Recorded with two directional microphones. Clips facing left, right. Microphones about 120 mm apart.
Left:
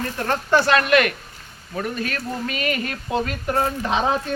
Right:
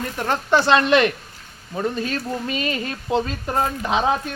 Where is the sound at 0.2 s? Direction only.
20° right (ahead or behind).